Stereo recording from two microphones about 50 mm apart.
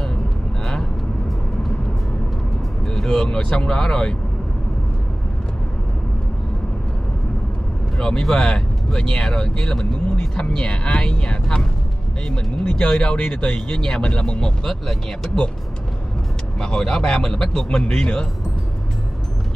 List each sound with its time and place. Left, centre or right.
2.9 s speech: centre
8.0 s speech: centre
12.6 s speech: left
16.5 s speech: centre